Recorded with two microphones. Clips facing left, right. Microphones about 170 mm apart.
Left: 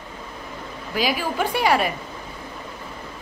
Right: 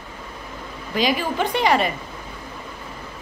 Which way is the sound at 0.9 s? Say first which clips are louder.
Right 2 dB; 5° left (ahead or behind).